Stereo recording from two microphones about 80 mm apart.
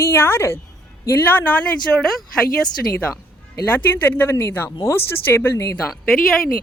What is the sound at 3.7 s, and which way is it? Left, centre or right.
Speech, left.